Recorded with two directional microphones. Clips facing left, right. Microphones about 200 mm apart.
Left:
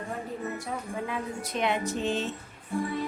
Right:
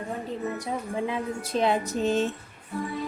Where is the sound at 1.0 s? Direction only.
30° right (ahead or behind).